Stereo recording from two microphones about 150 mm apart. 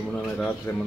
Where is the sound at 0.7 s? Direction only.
15° left (ahead or behind).